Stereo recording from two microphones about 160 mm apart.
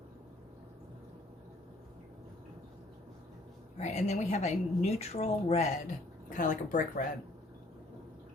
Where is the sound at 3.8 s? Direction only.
45° left (ahead or behind).